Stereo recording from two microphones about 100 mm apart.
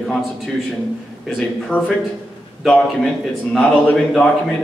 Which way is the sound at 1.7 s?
15° left (ahead or behind).